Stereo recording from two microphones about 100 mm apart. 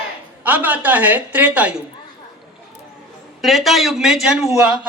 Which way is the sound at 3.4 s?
Centre (ahead or behind).